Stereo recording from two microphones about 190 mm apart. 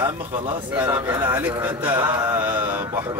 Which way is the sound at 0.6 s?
10° right (ahead or behind).